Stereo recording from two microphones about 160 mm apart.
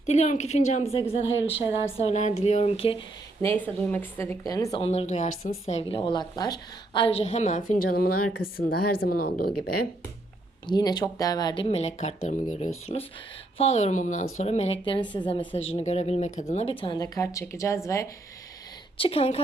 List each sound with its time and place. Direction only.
0.0 s a woman's voice: 45° left (ahead or behind)
3.4 s speech: 15° left (ahead or behind)
4.7 s speech: 40° left (ahead or behind)
5.9 s a woman's voice: 35° left (ahead or behind); by 9.5 s 75° left (ahead or behind)
10.7 s a woman's voice: 25° left (ahead or behind)
18.9 s speech: 35° left (ahead or behind)